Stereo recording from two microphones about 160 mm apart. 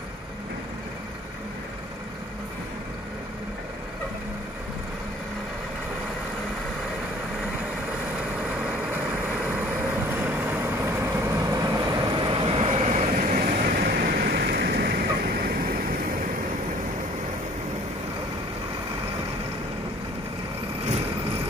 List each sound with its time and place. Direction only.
10.1 s vehicle: 10° right (ahead or behind)
12.3 s vehicle: 35° right (ahead or behind); by 15.7 s 70° right (ahead or behind)